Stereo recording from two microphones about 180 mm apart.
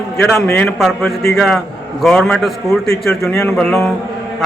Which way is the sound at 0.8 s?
Centre (ahead or behind).